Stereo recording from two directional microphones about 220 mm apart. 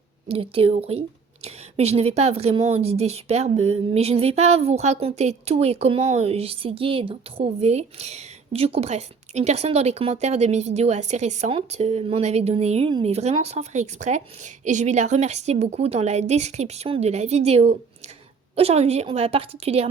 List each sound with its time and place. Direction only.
0.3 s a woman's voice: 25° right (ahead or behind)